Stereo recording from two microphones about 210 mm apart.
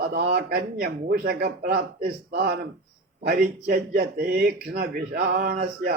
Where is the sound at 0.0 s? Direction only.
55° right (ahead or behind).